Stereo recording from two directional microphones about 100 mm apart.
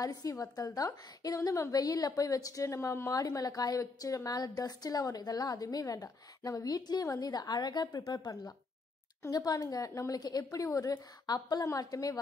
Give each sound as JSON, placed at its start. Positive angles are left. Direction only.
{"t": 0.0, "sound": "a woman's voice", "side_deg": 35}